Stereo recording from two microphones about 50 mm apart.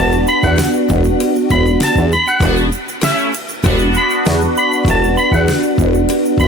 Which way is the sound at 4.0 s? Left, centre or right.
Centre.